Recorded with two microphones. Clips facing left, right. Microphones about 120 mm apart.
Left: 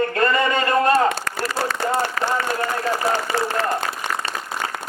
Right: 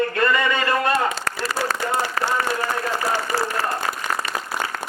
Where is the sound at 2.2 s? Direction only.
35° right (ahead or behind).